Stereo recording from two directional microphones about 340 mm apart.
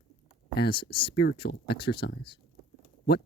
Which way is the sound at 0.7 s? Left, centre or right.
Centre.